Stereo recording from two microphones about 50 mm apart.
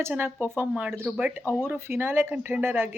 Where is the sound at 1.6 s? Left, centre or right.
Right.